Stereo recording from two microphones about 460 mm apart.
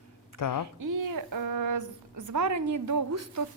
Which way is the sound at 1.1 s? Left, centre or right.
Right.